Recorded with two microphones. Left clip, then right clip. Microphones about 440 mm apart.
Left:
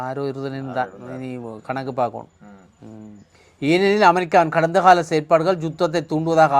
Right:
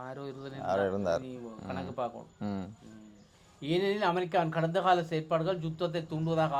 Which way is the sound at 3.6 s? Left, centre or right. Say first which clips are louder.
Left 14 dB; left.